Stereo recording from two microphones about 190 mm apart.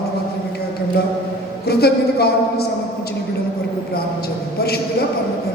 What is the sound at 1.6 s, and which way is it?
Speech, 55° left (ahead or behind).